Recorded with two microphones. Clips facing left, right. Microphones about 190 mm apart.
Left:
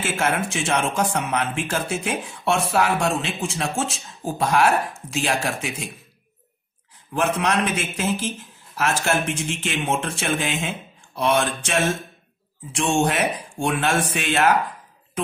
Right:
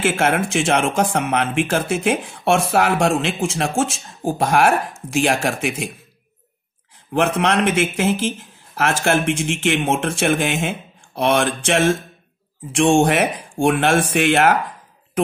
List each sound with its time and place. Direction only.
0.0 s speech: 55° right (ahead or behind)
7.2 s a man's voice: 65° right (ahead or behind)
8.7 s speech: 55° right (ahead or behind)
9.5 s a man's voice: 75° right (ahead or behind)
9.8 s speech: 50° right (ahead or behind)